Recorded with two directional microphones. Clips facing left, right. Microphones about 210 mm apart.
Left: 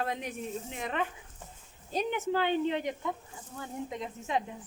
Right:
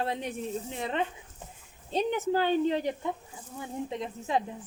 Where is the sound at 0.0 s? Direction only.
30° right (ahead or behind).